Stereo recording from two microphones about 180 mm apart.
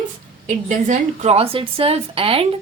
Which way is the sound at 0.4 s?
40° right (ahead or behind).